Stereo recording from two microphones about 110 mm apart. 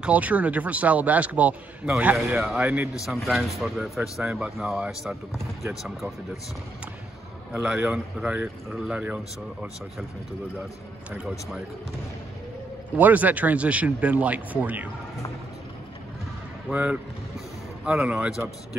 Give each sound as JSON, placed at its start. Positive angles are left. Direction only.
{"t": 0.0, "sound": "a man's voice", "side_deg": -15}
{"t": 7.5, "sound": "a man's voice", "side_deg": -5}
{"t": 11.1, "sound": "a man's voice", "side_deg": -10}
{"t": 12.9, "sound": "a man's voice", "side_deg": -15}
{"t": 16.7, "sound": "a man's voice", "side_deg": -10}